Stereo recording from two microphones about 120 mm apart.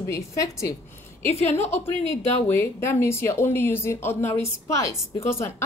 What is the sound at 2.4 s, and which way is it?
Speech, 15° left (ahead or behind).